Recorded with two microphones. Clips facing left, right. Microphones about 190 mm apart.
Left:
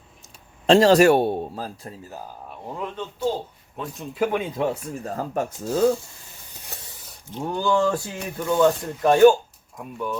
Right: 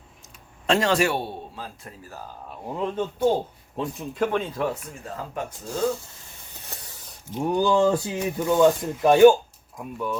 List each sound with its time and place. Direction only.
0.7 s a man's voice: 35° left (ahead or behind)
2.5 s speech: 5° right (ahead or behind)
2.9 s speech: 45° right (ahead or behind)
3.9 s speech: centre (ahead or behind)
5.0 s a man's voice: 40° left (ahead or behind)
7.3 s speech: 15° right (ahead or behind)
9.7 s speech: centre (ahead or behind)